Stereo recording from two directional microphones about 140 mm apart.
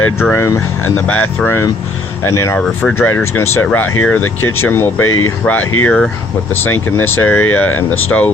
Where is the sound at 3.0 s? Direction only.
15° left (ahead or behind).